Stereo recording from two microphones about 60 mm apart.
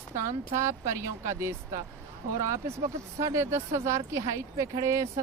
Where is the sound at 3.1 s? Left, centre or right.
Right.